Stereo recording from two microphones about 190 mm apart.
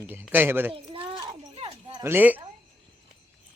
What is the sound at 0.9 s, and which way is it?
Clip-clop, 30° right (ahead or behind).